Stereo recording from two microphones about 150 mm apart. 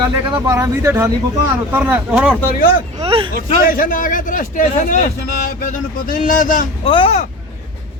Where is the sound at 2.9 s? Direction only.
35° right (ahead or behind).